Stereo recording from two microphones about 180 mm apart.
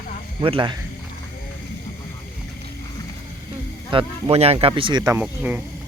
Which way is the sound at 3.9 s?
30° right (ahead or behind).